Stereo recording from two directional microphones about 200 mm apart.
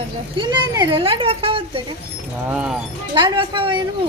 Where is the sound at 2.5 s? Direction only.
5° right (ahead or behind).